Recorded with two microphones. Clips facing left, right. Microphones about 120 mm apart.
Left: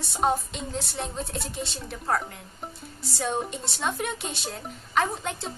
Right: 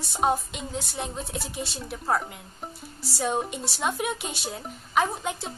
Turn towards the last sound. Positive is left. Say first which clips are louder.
# right 1 dB
turn(degrees=-5)  # may be behind; listen again after turning